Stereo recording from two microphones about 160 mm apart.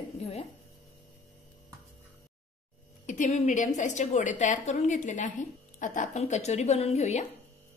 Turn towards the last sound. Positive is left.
turn(degrees=45)  # may be behind; listen again after turning